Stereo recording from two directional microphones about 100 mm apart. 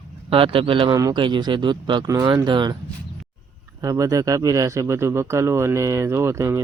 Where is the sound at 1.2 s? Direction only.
50° right (ahead or behind).